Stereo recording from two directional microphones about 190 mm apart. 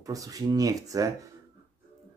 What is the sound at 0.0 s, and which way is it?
Speech, 15° right (ahead or behind).